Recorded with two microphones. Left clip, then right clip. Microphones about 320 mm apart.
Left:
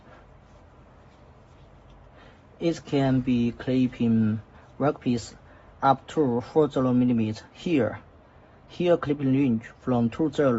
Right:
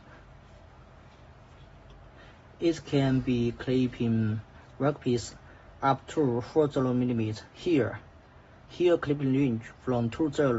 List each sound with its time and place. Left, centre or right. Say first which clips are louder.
2.6 s speech: left 2 dB; centre